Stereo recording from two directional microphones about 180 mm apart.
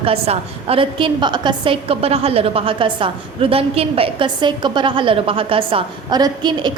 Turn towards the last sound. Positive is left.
turn(degrees=-25)  # may be behind; listen again after turning